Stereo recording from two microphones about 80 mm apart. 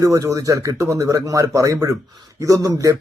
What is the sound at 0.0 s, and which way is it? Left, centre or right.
A man's voice, right.